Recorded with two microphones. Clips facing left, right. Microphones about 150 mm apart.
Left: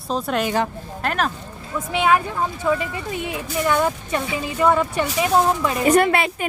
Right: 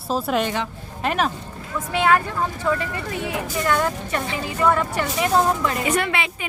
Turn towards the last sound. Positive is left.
turn(degrees=45)  # may be behind; listen again after turning